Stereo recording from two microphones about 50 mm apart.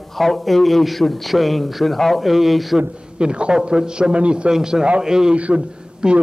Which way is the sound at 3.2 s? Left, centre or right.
Centre.